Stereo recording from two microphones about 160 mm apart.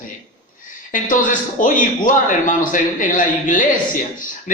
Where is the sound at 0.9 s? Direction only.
55° left (ahead or behind).